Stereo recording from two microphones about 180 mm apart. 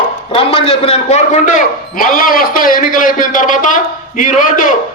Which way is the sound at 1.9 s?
50° left (ahead or behind).